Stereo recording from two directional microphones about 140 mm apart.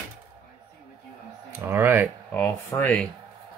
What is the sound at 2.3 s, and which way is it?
Speech, 15° left (ahead or behind).